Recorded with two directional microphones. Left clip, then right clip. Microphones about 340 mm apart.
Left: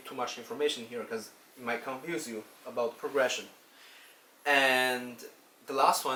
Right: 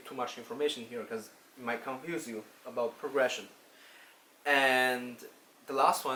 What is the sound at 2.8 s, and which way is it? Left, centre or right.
Speech, centre.